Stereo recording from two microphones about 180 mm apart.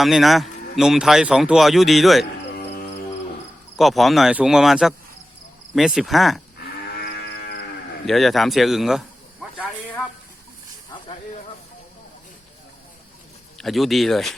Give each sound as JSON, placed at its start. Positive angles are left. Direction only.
{"t": 0.0, "sound": "speech", "side_deg": 0}
{"t": 3.8, "sound": "speech", "side_deg": 0}
{"t": 6.6, "sound": "moo", "side_deg": 65}
{"t": 8.0, "sound": "speech", "side_deg": 0}
{"t": 10.9, "sound": "hiss", "side_deg": 25}
{"t": 13.6, "sound": "speech", "side_deg": 0}